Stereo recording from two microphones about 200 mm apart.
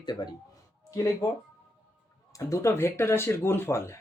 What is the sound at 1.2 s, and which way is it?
Speech, 15° left (ahead or behind).